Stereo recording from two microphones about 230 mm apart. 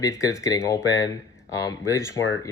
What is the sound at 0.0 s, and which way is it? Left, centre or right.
Speech, centre.